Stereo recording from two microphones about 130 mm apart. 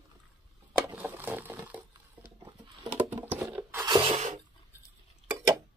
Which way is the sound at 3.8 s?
40° right (ahead or behind).